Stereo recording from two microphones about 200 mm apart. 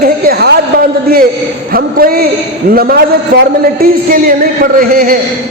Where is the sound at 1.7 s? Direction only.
50° right (ahead or behind).